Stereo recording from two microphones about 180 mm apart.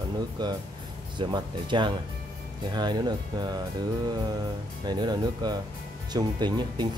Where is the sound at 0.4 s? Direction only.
25° right (ahead or behind).